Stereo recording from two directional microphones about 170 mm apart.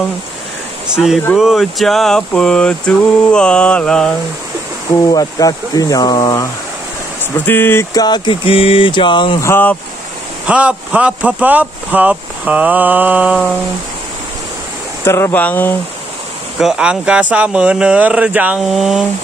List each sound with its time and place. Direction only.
0.9 s mantra: centre (ahead or behind)
5.1 s a sound: 20° left (ahead or behind)
7.3 s a sound: 10° left (ahead or behind); by 9.4 s 30° left (ahead or behind)
9.4 s speech: 10° left (ahead or behind)
10.4 s speech: 5° right (ahead or behind)
15.0 s speech: 15° left (ahead or behind)
16.5 s speech: 5° right (ahead or behind)